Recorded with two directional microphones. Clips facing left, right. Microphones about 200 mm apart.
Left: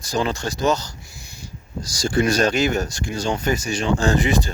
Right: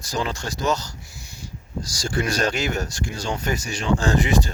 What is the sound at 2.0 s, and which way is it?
Speech, 20° left (ahead or behind).